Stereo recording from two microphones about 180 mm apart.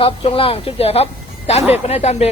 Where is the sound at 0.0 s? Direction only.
30° left (ahead or behind).